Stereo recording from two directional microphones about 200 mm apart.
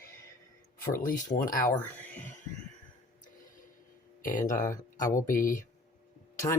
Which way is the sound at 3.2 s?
40° left (ahead or behind).